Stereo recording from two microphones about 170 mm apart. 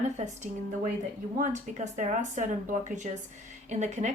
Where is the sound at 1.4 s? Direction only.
45° right (ahead or behind).